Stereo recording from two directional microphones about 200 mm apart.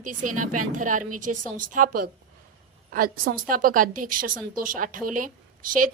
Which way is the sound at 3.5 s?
45° right (ahead or behind).